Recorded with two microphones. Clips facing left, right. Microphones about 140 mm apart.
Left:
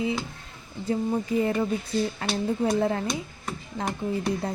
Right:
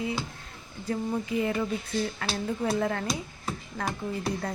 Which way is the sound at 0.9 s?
35° left (ahead or behind).